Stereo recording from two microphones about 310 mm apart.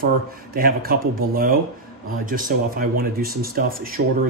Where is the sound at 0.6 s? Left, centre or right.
Right.